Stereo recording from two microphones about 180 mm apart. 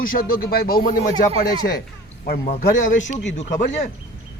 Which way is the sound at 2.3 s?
60° left (ahead or behind).